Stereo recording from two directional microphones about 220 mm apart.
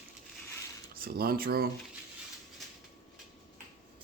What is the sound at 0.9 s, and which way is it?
Speech, 40° right (ahead or behind).